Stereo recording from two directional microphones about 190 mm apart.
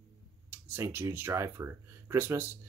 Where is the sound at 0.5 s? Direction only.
10° right (ahead or behind).